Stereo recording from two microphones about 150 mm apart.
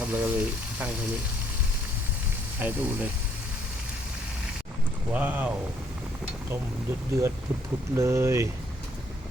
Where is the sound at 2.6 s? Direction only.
10° right (ahead or behind).